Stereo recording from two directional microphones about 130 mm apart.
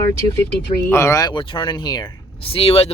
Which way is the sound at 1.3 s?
40° left (ahead or behind).